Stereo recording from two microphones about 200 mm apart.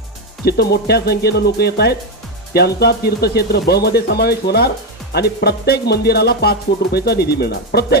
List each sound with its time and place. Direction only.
0.5 s speech: 50° left (ahead or behind)